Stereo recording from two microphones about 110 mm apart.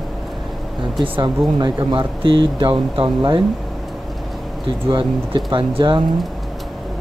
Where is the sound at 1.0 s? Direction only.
45° right (ahead or behind).